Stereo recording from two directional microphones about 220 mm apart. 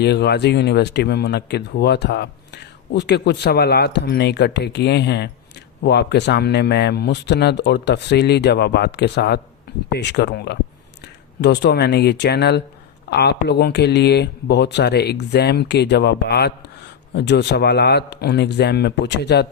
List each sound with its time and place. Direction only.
0.0 s speech: 50° left (ahead or behind)